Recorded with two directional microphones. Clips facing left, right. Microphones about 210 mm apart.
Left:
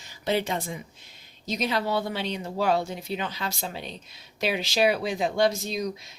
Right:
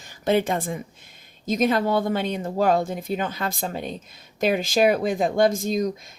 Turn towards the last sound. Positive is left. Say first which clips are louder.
# right 4 dB
turn(degrees=-45)  # may be behind; listen again after turning